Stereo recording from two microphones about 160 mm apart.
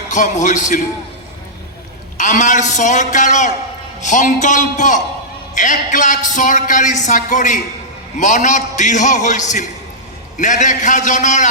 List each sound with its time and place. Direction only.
0.1 s a woman's voice: 50° left (ahead or behind)
2.1 s a woman's voice: 50° left (ahead or behind)